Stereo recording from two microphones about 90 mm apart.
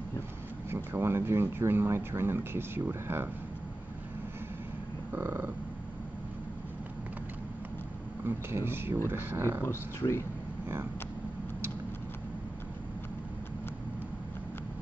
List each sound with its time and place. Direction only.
0.7 s speech: 25° right (ahead or behind)
5.1 s speech: 25° right (ahead or behind)
8.3 s speech: 25° right (ahead or behind)
9.7 s speech: 30° left (ahead or behind)